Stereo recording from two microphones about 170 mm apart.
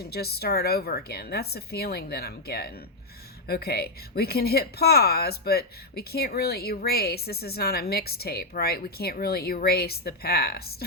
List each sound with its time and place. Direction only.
0.0 s a woman's voice: 65° left (ahead or behind)